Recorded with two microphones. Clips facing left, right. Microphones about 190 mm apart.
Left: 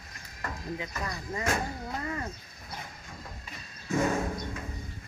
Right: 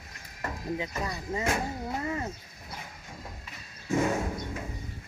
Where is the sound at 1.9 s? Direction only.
25° right (ahead or behind).